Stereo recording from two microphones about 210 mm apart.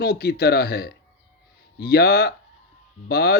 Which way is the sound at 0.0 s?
50° left (ahead or behind).